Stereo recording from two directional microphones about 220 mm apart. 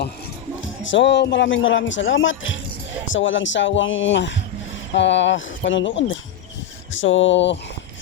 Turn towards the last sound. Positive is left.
turn(degrees=55)  # may be behind; listen again after turning